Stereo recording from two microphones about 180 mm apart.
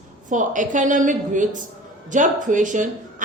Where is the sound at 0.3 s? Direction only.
45° right (ahead or behind).